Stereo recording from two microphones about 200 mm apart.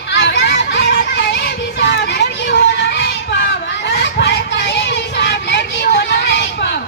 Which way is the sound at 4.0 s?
60° left (ahead or behind).